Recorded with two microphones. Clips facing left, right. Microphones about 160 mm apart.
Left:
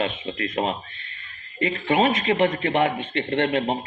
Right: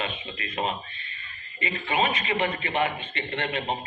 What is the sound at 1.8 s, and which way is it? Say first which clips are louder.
A man's voice: left 6 dB; 70° left (ahead or behind).